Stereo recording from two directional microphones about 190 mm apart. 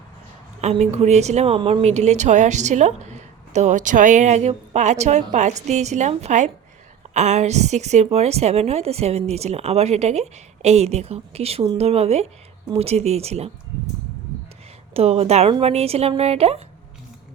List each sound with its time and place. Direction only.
0.6 s speech: 35° right (ahead or behind)
14.9 s speech: 35° right (ahead or behind)